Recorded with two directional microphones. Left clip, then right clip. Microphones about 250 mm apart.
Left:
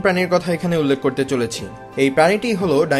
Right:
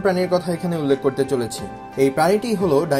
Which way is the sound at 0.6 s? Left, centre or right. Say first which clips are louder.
Left 2 dB; left.